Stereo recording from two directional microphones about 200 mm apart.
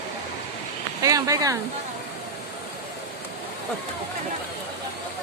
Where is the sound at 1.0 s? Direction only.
15° right (ahead or behind).